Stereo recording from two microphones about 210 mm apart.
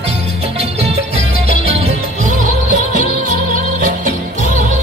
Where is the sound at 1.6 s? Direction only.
30° right (ahead or behind).